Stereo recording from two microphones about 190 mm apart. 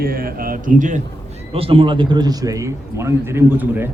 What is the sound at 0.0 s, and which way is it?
Speech, 50° right (ahead or behind).